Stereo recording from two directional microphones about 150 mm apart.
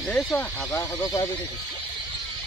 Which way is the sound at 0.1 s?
10° left (ahead or behind).